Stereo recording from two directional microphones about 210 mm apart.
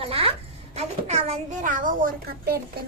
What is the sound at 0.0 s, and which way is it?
Music, 25° right (ahead or behind).